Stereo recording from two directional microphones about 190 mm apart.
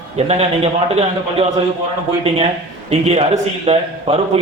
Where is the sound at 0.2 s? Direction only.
35° right (ahead or behind).